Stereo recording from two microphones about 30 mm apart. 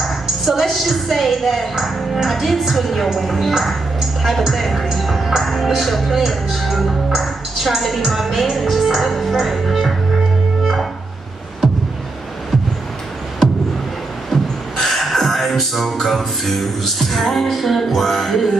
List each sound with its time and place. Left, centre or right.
0.0 s a woman's voice: centre
14.3 s music: centre
17.6 s a woman's voice: centre